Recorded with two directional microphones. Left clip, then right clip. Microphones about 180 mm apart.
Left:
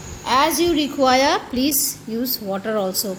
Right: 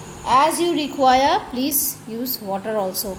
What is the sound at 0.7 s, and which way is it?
A woman's voice, 45° left (ahead or behind).